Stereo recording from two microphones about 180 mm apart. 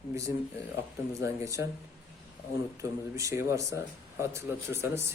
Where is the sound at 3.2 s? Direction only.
15° right (ahead or behind).